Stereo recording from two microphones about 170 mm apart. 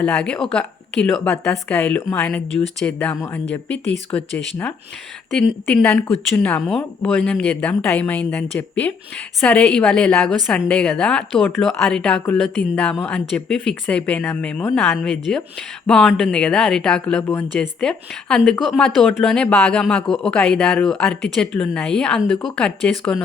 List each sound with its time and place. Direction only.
0.0 s a woman's voice: 5° left (ahead or behind)